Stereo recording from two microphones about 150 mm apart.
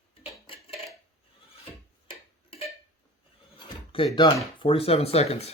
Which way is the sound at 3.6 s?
35° left (ahead or behind).